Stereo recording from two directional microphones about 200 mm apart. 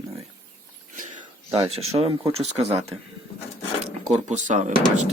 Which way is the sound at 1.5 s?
30° right (ahead or behind).